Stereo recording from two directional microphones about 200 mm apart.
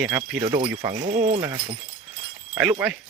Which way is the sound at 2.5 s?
5° right (ahead or behind).